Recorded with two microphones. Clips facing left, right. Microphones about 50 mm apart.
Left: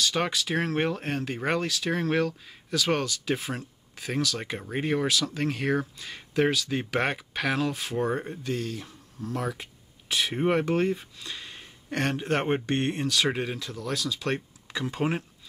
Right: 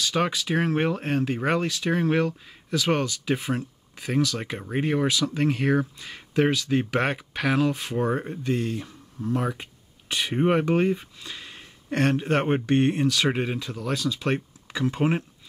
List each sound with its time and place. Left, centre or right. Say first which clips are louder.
0.1 s speech: right 3 dB; centre
13.3 s speech: right 3 dB; centre
13.6 s speech: right 3 dB; centre